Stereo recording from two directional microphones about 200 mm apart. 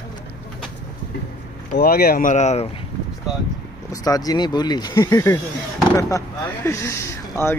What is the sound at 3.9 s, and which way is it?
Speech, 20° left (ahead or behind).